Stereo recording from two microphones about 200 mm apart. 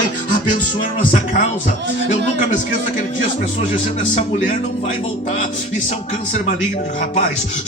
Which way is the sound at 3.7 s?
40° left (ahead or behind).